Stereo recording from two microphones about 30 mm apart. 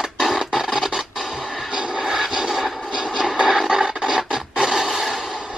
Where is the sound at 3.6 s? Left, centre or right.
Right.